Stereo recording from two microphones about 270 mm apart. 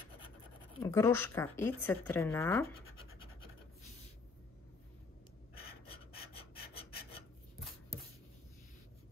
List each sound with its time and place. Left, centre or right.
0.8 s speech: centre
5.7 s filing: left
6.7 s filing: left